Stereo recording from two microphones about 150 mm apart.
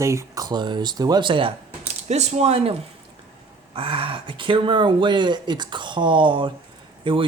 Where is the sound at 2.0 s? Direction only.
50° right (ahead or behind).